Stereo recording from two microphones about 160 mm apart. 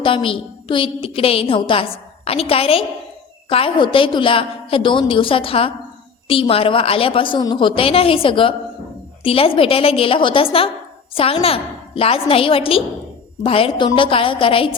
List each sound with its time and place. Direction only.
0.0 s a woman's voice: 35° left (ahead or behind)